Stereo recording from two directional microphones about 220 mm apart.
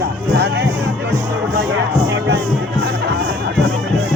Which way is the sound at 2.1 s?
50° right (ahead or behind).